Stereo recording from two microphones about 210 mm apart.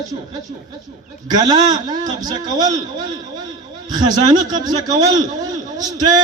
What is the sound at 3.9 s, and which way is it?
A man's voice, 20° right (ahead or behind).